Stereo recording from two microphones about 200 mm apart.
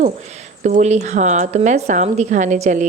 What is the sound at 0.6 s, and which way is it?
A woman's voice, 35° right (ahead or behind).